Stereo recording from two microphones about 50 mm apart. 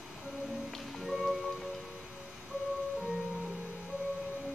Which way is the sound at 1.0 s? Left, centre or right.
Centre.